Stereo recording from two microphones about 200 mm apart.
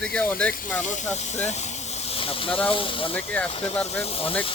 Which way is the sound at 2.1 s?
25° left (ahead or behind).